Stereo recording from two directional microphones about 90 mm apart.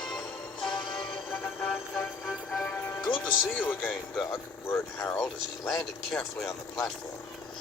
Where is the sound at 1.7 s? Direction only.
10° left (ahead or behind).